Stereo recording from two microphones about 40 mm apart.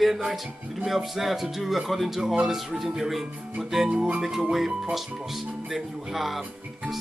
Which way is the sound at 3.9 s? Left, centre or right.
Right.